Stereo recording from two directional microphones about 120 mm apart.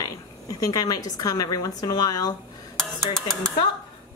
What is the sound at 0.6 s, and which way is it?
Speech, 30° left (ahead or behind).